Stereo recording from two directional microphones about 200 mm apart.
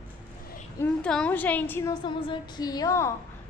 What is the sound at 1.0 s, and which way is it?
A woman's voice, 5° left (ahead or behind).